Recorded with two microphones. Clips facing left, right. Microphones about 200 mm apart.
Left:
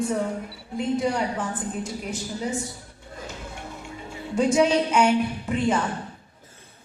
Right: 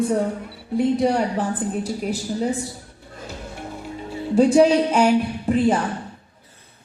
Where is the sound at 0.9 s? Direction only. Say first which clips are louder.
Right 5 dB; 35° right (ahead or behind).